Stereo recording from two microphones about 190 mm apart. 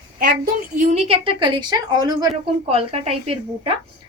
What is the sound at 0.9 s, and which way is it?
A woman's voice, 30° right (ahead or behind).